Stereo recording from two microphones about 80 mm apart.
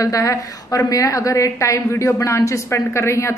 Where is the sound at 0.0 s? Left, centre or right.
Left.